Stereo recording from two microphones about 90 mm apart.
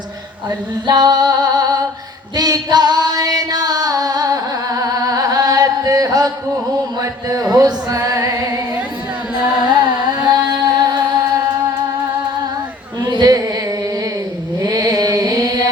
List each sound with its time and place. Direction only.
0.9 s music: 50° right (ahead or behind)
7.0 s a sound: 40° right (ahead or behind)
7.9 s music: 35° right (ahead or behind)
9.6 s carnatic music: 50° right (ahead or behind)
13.1 s a sound: 50° right (ahead or behind)
14.6 s chant: 45° right (ahead or behind)